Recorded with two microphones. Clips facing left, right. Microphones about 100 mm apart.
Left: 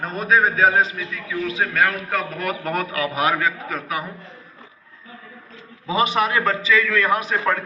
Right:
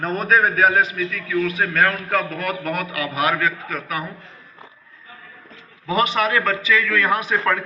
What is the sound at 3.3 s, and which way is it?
Speech, 20° left (ahead or behind).